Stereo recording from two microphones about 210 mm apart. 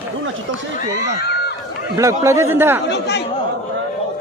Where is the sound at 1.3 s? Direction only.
50° left (ahead or behind).